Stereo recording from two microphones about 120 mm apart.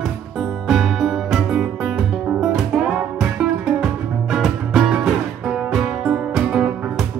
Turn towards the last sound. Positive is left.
turn(degrees=-5)  # may be behind; listen again after turning